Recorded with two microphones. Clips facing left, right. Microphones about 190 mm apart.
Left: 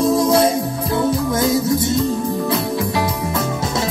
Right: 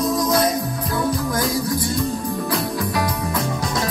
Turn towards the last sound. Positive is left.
turn(degrees=25)  # may be behind; listen again after turning